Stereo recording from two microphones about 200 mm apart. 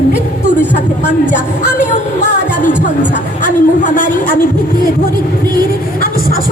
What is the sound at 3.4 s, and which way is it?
Speech, 40° left (ahead or behind).